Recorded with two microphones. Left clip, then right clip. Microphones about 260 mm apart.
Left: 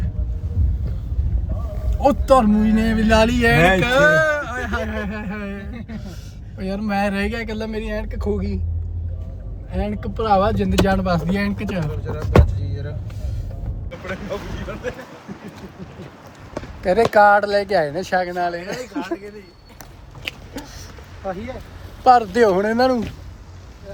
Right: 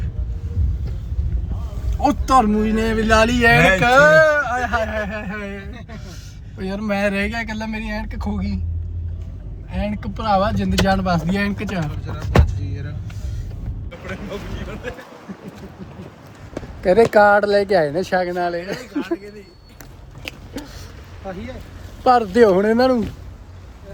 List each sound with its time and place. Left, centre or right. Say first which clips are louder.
2.2 s a man's voice: right 1 dB; centre
9.7 s speech: left 2 dB; centre
14.1 s a sound: left 2 dB; centre
17.1 s speech: even; right
20.2 s a sound: left 3 dB; centre
21.2 s speech: left 4 dB; centre
22.0 s speech: even; right